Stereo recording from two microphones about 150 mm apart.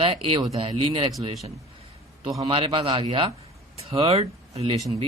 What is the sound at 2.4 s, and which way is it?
Speech, 40° right (ahead or behind).